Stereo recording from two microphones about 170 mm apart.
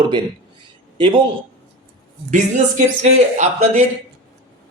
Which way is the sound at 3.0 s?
40° right (ahead or behind).